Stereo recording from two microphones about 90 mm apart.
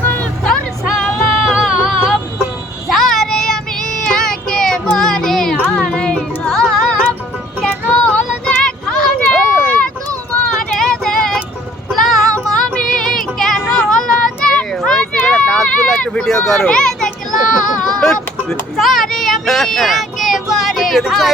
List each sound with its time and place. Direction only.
0.0 s music: 20° left (ahead or behind)
0.4 s music: 5° left (ahead or behind)
2.9 s child singing: 5° left (ahead or behind)
5.7 s music: 10° left (ahead or behind)
7.9 s a sound: 10° left (ahead or behind)
10.8 s child singing: 5° left (ahead or behind)
14.8 s a sound: 10° left (ahead or behind)
18.0 s vehicle: 5° left (ahead or behind)
21.1 s a sound: centre (ahead or behind)